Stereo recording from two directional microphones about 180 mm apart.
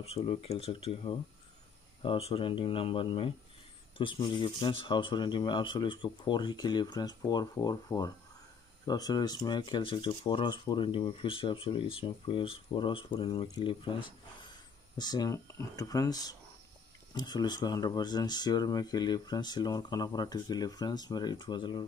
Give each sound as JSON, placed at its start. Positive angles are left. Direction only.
{"t": 0.0, "sound": "speech", "side_deg": 35}